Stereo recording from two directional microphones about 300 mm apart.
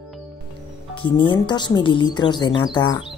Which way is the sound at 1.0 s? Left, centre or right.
Centre.